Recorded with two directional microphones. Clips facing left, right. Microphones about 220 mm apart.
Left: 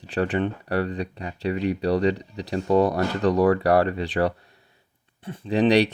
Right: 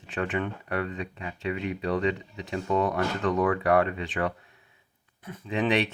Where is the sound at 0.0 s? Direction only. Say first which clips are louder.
Left 6 dB; 35° left (ahead or behind).